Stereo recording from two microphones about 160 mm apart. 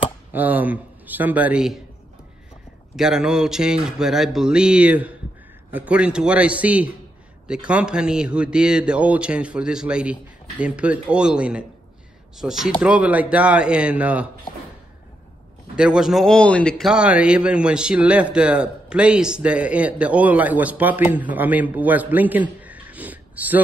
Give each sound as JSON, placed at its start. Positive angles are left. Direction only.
{"t": 0.3, "sound": "a man's voice", "side_deg": -10}
{"t": 3.0, "sound": "a man's voice", "side_deg": -5}
{"t": 14.5, "sound": "a sound", "side_deg": 25}
{"t": 15.7, "sound": "a man's voice", "side_deg": -5}